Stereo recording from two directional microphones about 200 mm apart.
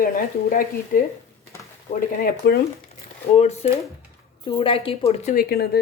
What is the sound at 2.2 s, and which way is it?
Speech, 50° left (ahead or behind).